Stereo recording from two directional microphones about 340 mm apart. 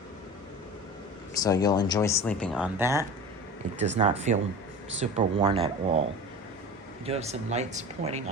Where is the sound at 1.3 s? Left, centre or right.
Centre.